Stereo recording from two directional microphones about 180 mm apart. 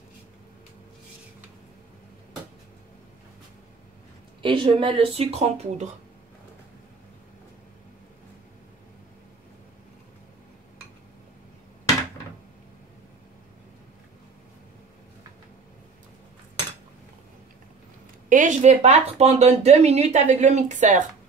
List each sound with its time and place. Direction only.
4.4 s speech: 30° right (ahead or behind)
18.3 s speech: 45° right (ahead or behind)